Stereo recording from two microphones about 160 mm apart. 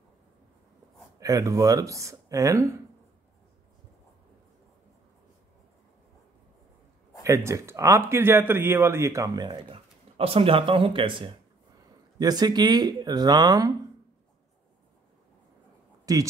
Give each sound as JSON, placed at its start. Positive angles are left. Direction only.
{"t": 1.2, "sound": "a man's voice", "side_deg": -20}
{"t": 7.2, "sound": "a man's voice", "side_deg": -20}
{"t": 16.1, "sound": "speech", "side_deg": -20}